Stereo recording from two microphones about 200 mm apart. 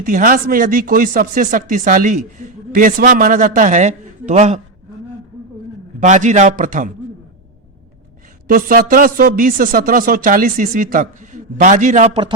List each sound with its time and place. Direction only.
0.0 s speech: 40° right (ahead or behind)
6.0 s speech: 35° right (ahead or behind)
8.4 s speech: 45° right (ahead or behind); by 12.3 s 30° right (ahead or behind)